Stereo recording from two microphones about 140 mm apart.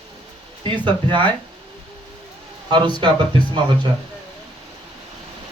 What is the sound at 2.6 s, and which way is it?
Speech, 35° right (ahead or behind).